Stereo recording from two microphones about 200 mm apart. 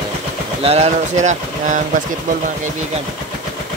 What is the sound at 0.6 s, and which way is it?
Speech, 30° right (ahead or behind).